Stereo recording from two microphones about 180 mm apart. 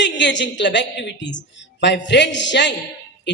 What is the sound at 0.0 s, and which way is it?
A woman's voice, 80° left.